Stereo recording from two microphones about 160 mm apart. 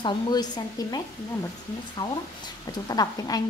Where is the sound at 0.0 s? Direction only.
25° left (ahead or behind).